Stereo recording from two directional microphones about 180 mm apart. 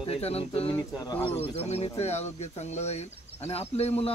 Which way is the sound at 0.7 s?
20° left (ahead or behind).